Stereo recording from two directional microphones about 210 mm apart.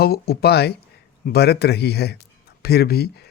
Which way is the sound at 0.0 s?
45° left (ahead or behind).